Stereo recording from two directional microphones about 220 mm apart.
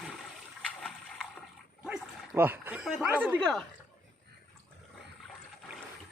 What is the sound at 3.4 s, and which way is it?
Speech, centre (ahead or behind).